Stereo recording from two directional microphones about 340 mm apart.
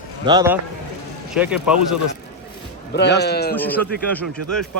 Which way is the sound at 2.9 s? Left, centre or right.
Left.